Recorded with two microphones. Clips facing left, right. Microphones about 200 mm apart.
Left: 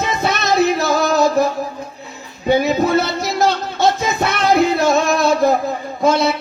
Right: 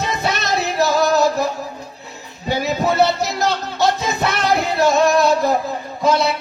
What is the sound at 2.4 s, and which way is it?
Music, 50° left (ahead or behind).